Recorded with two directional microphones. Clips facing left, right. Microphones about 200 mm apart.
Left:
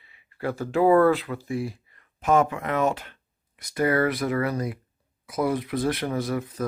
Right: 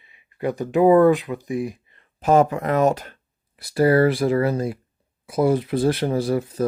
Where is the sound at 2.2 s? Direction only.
35° right (ahead or behind).